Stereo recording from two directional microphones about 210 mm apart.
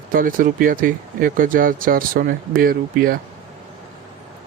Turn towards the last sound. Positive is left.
turn(degrees=-45)  # may be behind; listen again after turning